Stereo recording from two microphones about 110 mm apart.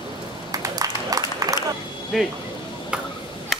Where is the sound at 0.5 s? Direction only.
35° right (ahead or behind).